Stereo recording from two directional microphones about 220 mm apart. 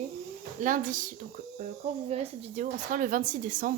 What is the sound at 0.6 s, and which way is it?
A woman's voice, 35° right (ahead or behind).